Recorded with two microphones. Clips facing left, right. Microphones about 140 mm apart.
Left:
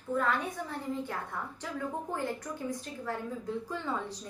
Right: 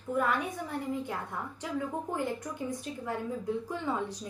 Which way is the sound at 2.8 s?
15° right (ahead or behind).